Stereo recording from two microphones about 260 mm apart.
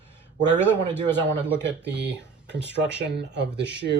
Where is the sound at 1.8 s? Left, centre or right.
Right.